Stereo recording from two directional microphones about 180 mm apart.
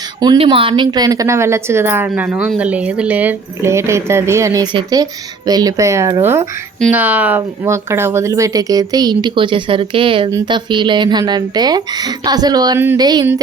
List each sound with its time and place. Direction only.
0.2 s speech: 25° right (ahead or behind)